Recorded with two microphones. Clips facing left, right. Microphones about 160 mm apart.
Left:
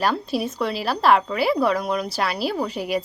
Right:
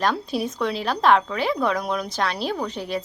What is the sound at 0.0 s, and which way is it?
Speech, 5° left (ahead or behind).